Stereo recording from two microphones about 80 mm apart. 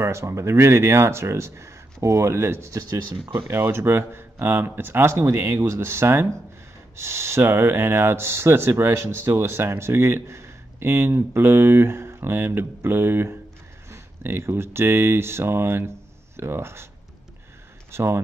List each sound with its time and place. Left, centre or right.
0.0 s speech: right
17.9 s speech: right